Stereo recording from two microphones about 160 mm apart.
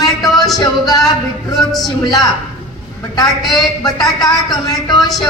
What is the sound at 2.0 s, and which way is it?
Speech, 25° left (ahead or behind).